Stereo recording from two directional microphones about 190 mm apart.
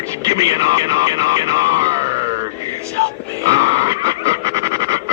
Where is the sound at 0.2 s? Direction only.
20° right (ahead or behind).